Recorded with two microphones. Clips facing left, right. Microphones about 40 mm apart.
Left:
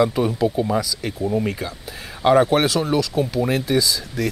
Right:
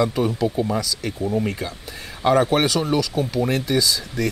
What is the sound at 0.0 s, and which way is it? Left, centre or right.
Speech, centre.